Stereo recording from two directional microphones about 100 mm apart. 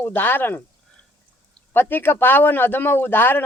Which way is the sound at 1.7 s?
20° left (ahead or behind).